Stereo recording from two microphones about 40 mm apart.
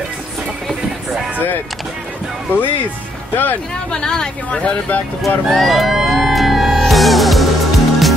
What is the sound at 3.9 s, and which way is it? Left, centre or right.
Speech, centre.